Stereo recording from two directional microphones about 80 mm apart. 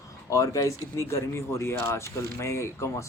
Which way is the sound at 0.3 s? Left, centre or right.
Left.